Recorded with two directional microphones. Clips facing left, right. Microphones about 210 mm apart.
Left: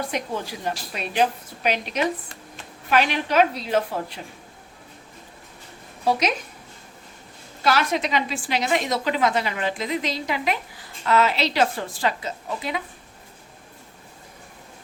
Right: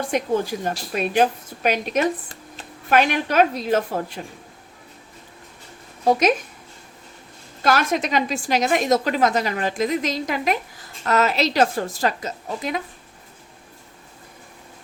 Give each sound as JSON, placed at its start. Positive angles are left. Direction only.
{"t": 0.1, "sound": "a woman's voice", "side_deg": -45}
{"t": 6.1, "sound": "a woman's voice", "side_deg": -50}
{"t": 7.6, "sound": "a woman's voice", "side_deg": -45}